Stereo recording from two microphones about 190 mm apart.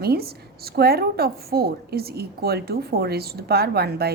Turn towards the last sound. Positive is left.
turn(degrees=-55)  # may be behind; listen again after turning